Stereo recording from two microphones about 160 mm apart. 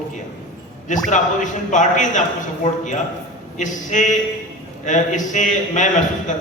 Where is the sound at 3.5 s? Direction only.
50° left (ahead or behind).